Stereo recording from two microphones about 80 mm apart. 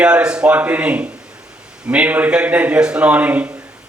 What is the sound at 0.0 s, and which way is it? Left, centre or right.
A man's voice, centre.